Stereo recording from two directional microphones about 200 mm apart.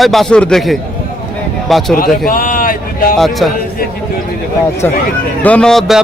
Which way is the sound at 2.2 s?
45° left (ahead or behind).